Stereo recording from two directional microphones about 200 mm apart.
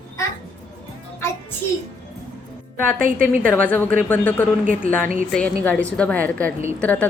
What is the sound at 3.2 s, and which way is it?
A woman's voice, 5° left (ahead or behind).